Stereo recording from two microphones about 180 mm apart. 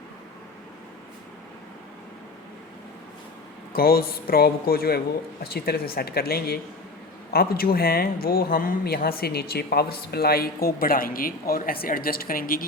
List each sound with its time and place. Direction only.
3.7 s speech: 55° left (ahead or behind)